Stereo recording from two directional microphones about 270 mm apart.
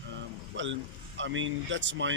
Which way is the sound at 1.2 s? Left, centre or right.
Right.